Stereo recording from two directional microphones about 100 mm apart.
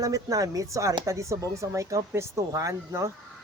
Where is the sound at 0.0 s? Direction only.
35° right (ahead or behind).